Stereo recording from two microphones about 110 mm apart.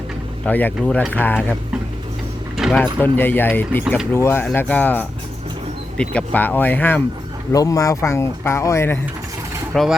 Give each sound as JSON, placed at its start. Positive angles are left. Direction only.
{"t": 0.4, "sound": "speech", "side_deg": 15}
{"t": 2.7, "sound": "speech", "side_deg": 15}
{"t": 7.5, "sound": "speech", "side_deg": 35}
{"t": 9.7, "sound": "speech", "side_deg": 5}